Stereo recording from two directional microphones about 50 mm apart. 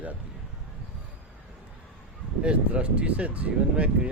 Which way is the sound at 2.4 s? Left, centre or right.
Right.